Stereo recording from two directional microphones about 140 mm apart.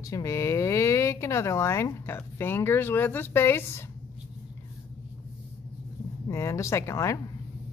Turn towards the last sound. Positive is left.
turn(degrees=20)  # may be behind; listen again after turning